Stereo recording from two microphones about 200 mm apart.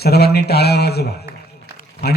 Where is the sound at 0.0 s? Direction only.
50° left (ahead or behind).